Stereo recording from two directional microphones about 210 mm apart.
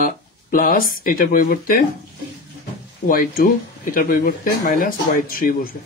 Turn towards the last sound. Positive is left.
turn(degrees=45)  # may be behind; listen again after turning